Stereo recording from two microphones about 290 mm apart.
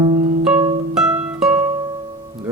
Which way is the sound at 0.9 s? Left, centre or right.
Centre.